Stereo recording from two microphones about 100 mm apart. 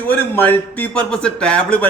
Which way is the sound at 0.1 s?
15° left (ahead or behind).